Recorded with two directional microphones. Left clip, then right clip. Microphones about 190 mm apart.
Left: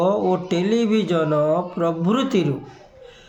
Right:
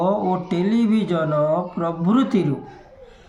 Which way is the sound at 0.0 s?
50° left (ahead or behind).